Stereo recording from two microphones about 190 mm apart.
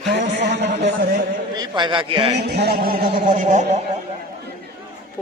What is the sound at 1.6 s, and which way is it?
Mantra, 25° right (ahead or behind).